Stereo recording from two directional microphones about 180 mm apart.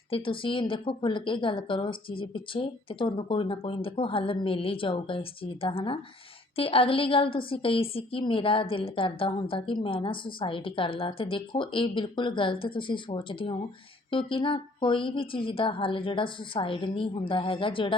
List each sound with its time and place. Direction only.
0.1 s a woman's voice: 30° left (ahead or behind)